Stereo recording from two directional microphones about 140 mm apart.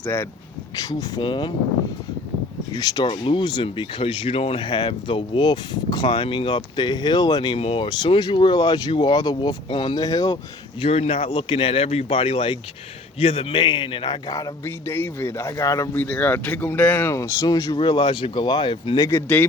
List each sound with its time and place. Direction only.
0.0 s speech: 15° left (ahead or behind)
0.8 s speech: 25° left (ahead or behind)
2.7 s a man's voice: 30° left (ahead or behind)
10.8 s a man's voice: 45° left (ahead or behind); by 16.0 s 20° left (ahead or behind)
16.0 s speech: 10° left (ahead or behind)
17.7 s speech: 35° left (ahead or behind)
19.0 s speech: 15° left (ahead or behind)